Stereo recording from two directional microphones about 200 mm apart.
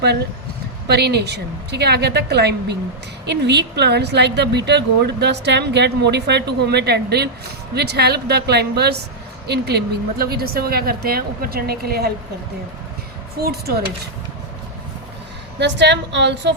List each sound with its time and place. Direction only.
0.9 s a woman's voice: 55° right (ahead or behind)
13.4 s a woman's voice: 50° right (ahead or behind)
15.5 s a woman's voice: 60° right (ahead or behind)